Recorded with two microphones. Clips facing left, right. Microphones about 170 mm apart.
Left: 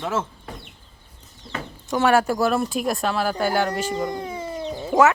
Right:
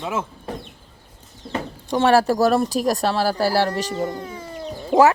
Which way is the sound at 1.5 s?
30° right (ahead or behind).